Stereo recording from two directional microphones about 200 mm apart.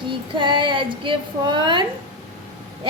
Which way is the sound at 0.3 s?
25° right (ahead or behind).